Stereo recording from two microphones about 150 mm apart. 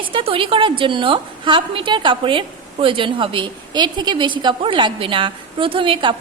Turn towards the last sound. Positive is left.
turn(degrees=-35)  # may be behind; listen again after turning